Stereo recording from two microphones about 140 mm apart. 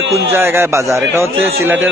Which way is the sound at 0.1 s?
20° right (ahead or behind).